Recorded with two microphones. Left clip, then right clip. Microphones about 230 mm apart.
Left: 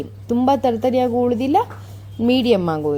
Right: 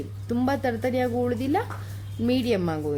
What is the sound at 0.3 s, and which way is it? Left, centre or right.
A woman's voice, centre.